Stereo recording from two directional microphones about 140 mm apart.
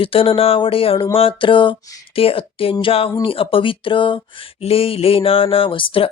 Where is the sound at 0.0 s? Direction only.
40° left (ahead or behind).